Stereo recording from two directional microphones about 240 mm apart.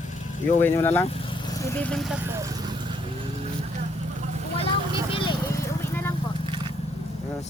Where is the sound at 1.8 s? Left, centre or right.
Centre.